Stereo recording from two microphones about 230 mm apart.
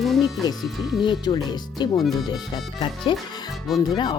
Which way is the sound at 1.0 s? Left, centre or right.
Centre.